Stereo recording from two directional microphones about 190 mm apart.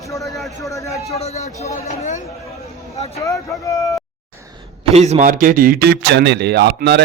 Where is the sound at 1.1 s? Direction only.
35° left (ahead or behind).